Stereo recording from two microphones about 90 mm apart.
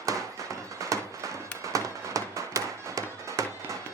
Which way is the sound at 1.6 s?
35° right (ahead or behind).